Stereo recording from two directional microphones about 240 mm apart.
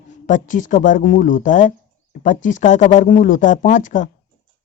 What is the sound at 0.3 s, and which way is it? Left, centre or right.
Speech, left.